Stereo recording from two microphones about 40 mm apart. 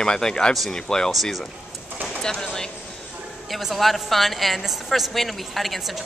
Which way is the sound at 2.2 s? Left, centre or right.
Centre.